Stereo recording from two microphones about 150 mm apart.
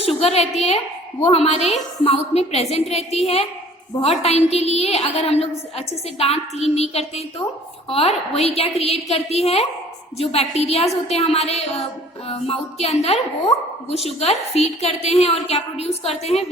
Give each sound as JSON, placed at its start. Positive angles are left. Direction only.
{"t": 0.0, "sound": "a woman's voice", "side_deg": 40}